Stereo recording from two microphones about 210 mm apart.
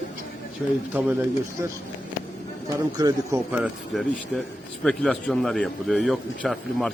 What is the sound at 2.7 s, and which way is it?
Speech, 15° right (ahead or behind).